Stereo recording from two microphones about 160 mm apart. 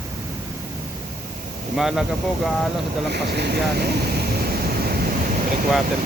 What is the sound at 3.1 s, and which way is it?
Waves, 90° right.